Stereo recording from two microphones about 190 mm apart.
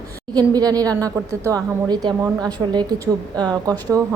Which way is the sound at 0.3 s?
20° right (ahead or behind).